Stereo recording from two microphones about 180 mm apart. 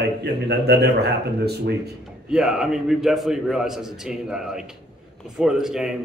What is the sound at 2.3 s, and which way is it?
A man's voice, 5° right (ahead or behind).